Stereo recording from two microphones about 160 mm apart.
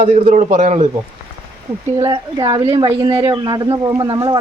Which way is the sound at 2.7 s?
35° right (ahead or behind).